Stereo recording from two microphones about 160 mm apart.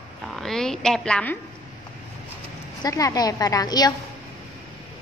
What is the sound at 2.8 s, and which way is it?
A woman's voice, 20° left (ahead or behind).